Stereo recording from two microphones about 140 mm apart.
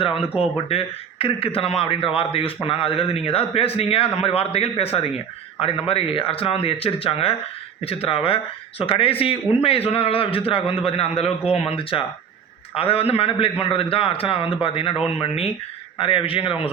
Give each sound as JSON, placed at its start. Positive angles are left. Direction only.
{"t": 0.0, "sound": "a man's voice", "side_deg": 40}